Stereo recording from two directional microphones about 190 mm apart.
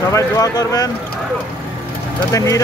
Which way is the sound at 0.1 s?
15° left (ahead or behind).